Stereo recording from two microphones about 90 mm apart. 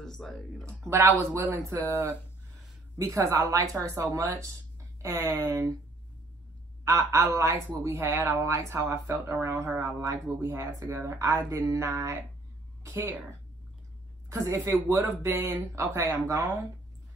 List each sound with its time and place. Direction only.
0.0 s speech: 5° left (ahead or behind)
0.8 s a woman's voice: 30° right (ahead or behind)
3.0 s a woman's voice: 35° right (ahead or behind)
6.8 s a woman's voice: 35° right (ahead or behind)
14.3 s a woman's voice: 35° right (ahead or behind)